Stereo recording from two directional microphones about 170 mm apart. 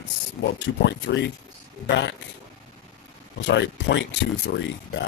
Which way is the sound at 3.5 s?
90° left.